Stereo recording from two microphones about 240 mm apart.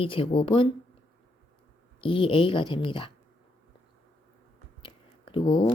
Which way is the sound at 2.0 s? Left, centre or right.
Left.